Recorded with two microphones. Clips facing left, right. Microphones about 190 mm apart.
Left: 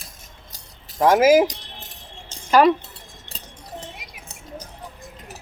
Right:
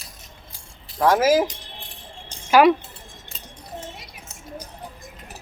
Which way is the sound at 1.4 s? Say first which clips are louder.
Left 4 dB; 40° left (ahead or behind).